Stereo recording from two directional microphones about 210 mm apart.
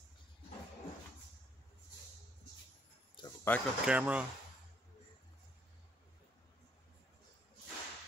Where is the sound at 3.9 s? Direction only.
5° right (ahead or behind).